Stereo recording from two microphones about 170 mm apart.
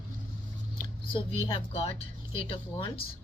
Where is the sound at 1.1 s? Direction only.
30° left (ahead or behind).